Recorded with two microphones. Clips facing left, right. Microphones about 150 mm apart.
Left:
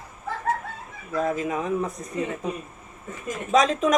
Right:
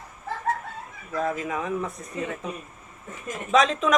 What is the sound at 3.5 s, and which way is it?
Speech, 40° left (ahead or behind).